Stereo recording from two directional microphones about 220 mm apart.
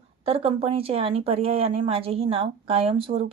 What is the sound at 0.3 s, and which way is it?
A woman's voice, 25° right (ahead or behind).